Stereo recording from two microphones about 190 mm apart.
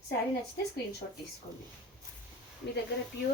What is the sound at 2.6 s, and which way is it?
Speech, 60° left (ahead or behind).